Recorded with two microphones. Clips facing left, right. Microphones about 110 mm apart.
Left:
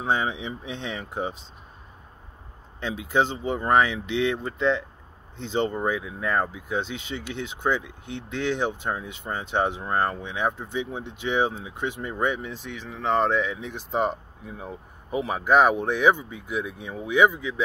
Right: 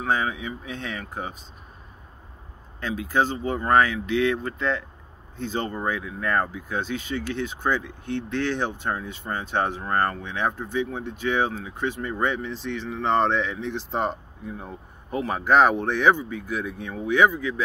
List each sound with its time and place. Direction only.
0.0 s speech: 25° left (ahead or behind)
2.8 s speech: 20° left (ahead or behind)